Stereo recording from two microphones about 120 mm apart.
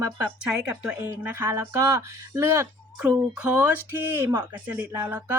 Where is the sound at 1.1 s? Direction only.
15° right (ahead or behind).